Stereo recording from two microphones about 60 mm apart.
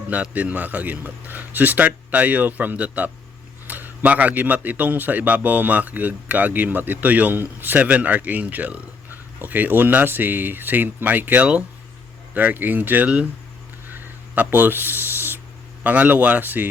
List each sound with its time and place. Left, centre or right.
0.1 s a man's voice: right
13.9 s a sound: right
15.8 s a man's voice: right